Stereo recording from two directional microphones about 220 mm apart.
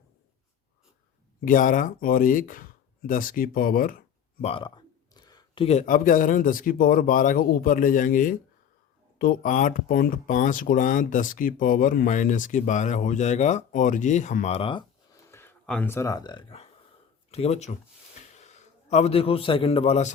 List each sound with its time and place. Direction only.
1.5 s speech: 35° left (ahead or behind)
4.4 s speech: 20° left (ahead or behind)
15.3 s a man's voice: 10° left (ahead or behind); by 20.1 s 30° left (ahead or behind)